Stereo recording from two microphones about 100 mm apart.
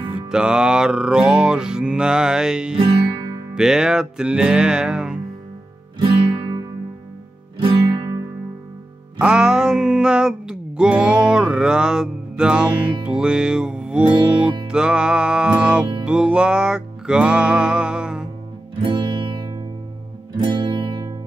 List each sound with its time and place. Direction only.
0.3 s mantra: 10° right (ahead or behind)
5.9 s guitar: 55° right (ahead or behind)
9.2 s music: 10° right (ahead or behind)
14.3 s mantra: 10° right (ahead or behind)
16.1 s music: 10° right (ahead or behind)
18.8 s music: 50° right (ahead or behind)